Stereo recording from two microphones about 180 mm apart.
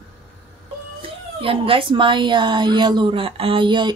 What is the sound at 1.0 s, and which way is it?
Speech, 30° right (ahead or behind).